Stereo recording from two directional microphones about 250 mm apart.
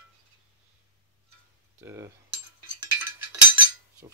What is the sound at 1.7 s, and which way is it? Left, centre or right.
Cutlery, centre.